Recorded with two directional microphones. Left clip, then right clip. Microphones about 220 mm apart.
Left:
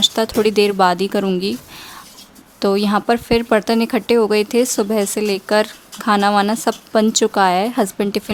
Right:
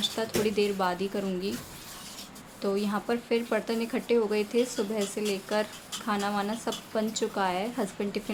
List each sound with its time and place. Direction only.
0.0 s speech: 50° left (ahead or behind)
2.6 s speech: 50° left (ahead or behind)